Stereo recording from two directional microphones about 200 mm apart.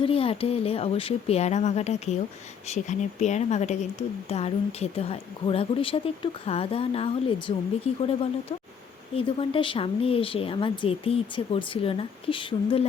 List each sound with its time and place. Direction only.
0.0 s speech: 30° left (ahead or behind)
9.1 s speech: 25° left (ahead or behind)